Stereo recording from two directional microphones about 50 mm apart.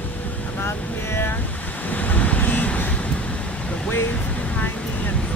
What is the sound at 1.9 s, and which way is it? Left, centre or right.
Vehicle, left.